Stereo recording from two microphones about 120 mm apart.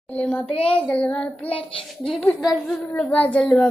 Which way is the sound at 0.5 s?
50° left (ahead or behind).